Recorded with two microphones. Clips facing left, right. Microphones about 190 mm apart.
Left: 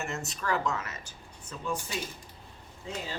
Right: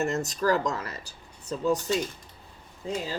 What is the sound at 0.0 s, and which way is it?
Speech, 40° right (ahead or behind).